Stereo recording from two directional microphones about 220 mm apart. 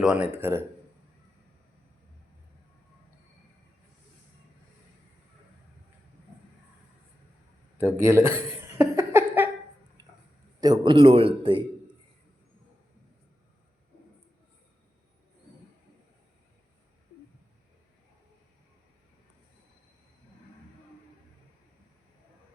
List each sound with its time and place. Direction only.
0.0 s speech: 5° right (ahead or behind)
7.8 s a sound: 10° right (ahead or behind)
10.6 s a man's voice: 20° right (ahead or behind)